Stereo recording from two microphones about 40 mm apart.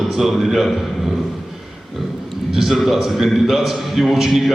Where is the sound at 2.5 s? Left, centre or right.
Centre.